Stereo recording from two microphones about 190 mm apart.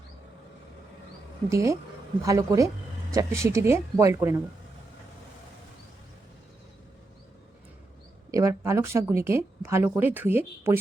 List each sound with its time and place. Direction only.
1.5 s speech: 15° right (ahead or behind)
8.3 s speech: 15° right (ahead or behind)